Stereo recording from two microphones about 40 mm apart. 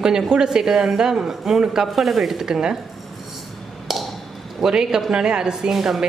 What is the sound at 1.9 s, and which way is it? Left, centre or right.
Speech, centre.